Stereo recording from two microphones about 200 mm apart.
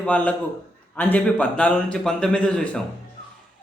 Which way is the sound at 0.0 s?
5° left (ahead or behind).